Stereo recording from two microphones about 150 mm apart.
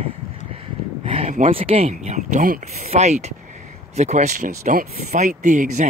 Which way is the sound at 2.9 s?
50° right (ahead or behind).